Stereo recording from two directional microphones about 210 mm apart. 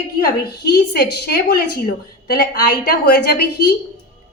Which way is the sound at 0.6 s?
50° left (ahead or behind).